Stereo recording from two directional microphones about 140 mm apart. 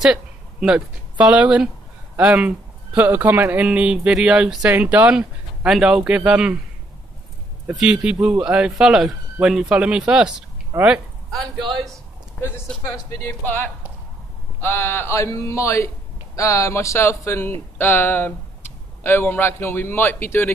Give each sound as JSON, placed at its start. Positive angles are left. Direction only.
{"t": 0.0, "sound": "speech", "side_deg": -5}
{"t": 7.6, "sound": "speech", "side_deg": -5}
{"t": 12.8, "sound": "speech", "side_deg": 25}
{"t": 13.3, "sound": "a man's voice", "side_deg": 15}